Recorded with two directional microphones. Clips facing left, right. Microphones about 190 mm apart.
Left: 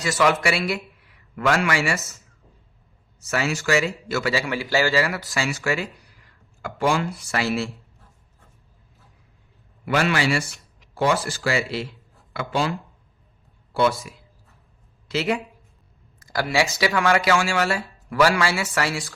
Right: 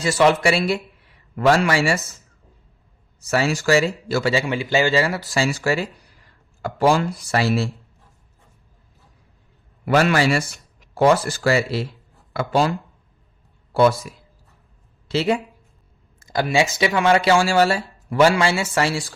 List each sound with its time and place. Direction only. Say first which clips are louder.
0.0 s a man's voice: right 4 dB; 30° right (ahead or behind)
3.2 s a man's voice: right 4 dB; 35° right (ahead or behind)
9.8 s a man's voice: right 4 dB; 40° right (ahead or behind)
13.7 s a man's voice: right 5 dB; 40° right (ahead or behind)
15.0 s speech: right 4 dB; 30° right (ahead or behind)